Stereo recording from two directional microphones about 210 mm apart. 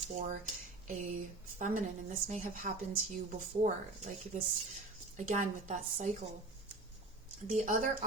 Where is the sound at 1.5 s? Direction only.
35° right (ahead or behind).